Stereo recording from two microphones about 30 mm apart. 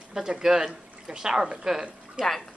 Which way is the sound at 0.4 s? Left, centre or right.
Right.